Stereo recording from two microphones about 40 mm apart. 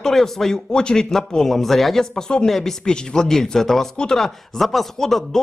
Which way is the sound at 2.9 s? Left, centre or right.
Centre.